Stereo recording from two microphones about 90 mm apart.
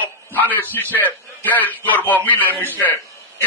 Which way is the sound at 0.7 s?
20° left (ahead or behind).